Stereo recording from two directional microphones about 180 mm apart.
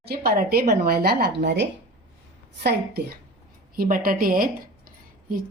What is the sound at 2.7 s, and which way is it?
A woman's voice, 60° right (ahead or behind).